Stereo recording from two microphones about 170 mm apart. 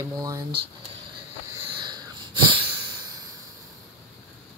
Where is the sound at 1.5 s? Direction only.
25° right (ahead or behind).